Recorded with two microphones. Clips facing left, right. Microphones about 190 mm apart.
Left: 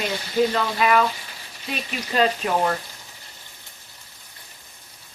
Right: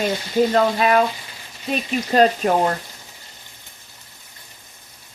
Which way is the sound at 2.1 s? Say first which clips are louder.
Right 5 dB; 45° right (ahead or behind).